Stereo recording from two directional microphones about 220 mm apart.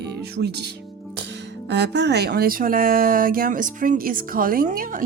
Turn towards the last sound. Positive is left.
turn(degrees=-40)  # may be behind; listen again after turning